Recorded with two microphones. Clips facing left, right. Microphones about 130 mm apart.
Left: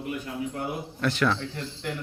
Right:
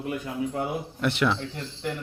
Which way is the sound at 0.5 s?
25° right (ahead or behind).